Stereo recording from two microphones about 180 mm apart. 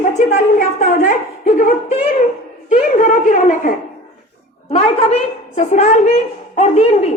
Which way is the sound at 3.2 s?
45° left (ahead or behind).